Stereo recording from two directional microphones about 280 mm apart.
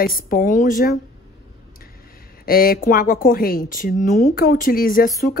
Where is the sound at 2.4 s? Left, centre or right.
Left.